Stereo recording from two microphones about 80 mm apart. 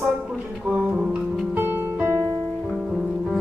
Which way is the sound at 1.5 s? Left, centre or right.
Right.